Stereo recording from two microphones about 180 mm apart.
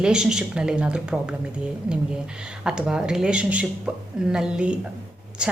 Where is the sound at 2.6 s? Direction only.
5° right (ahead or behind).